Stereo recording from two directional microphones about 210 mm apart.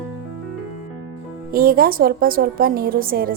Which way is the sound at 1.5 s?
45° right (ahead or behind).